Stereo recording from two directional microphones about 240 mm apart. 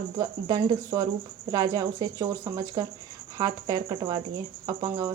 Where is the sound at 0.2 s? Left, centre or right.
Centre.